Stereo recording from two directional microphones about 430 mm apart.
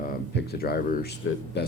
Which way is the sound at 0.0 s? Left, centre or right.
Centre.